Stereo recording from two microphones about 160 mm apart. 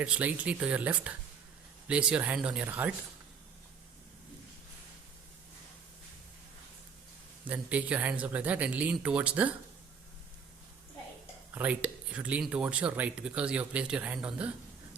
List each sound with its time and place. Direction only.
0.0 s speech: 10° right (ahead or behind)
7.4 s speech: 10° right (ahead or behind)
11.5 s speech: 10° right (ahead or behind)